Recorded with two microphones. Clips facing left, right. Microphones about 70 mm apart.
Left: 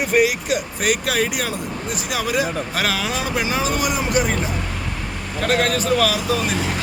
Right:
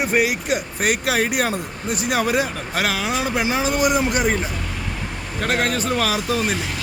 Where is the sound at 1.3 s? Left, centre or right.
Right.